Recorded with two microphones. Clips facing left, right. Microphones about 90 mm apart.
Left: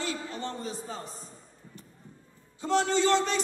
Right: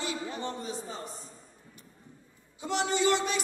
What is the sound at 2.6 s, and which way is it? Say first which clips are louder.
Speech: left 3 dB; 15° right (ahead or behind).